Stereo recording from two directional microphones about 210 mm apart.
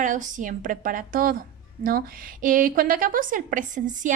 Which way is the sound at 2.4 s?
40° right (ahead or behind).